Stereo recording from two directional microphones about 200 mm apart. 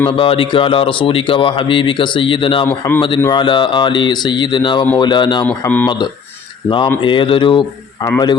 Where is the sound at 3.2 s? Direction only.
20° left (ahead or behind).